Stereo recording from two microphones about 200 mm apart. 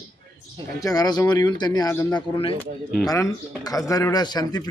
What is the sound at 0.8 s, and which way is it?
Speech, 20° left (ahead or behind).